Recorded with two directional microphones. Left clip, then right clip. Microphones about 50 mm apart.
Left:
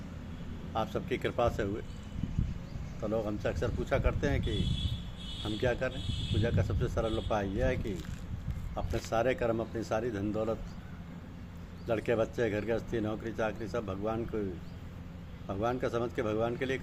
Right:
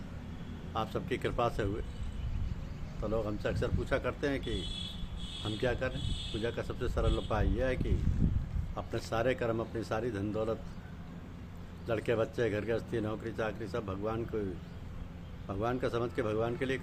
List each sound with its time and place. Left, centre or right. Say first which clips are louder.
0.7 s speech: left 2 dB; right
3.0 s speech: left 1 dB; right
7.0 s speech: left 2 dB; centre
11.9 s speech: left 1 dB; right
15.4 s speech: left 1 dB; right